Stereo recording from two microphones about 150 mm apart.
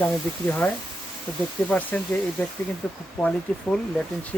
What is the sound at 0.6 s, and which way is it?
Speech, 10° left (ahead or behind).